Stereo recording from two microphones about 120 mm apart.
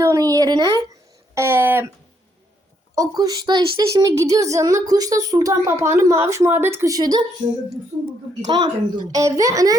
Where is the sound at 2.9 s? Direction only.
30° right (ahead or behind).